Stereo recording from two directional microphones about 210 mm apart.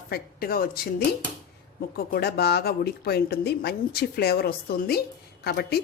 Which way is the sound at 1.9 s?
50° left (ahead or behind).